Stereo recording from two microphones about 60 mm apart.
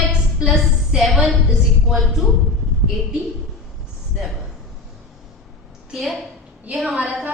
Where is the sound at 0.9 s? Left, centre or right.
Centre.